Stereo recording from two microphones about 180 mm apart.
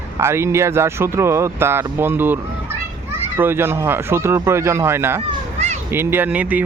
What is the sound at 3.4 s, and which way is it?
Speech, 10° right (ahead or behind).